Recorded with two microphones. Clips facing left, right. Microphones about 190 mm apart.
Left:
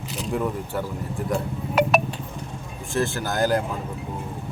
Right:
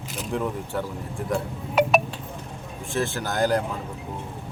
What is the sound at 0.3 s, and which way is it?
Speech, 5° left (ahead or behind).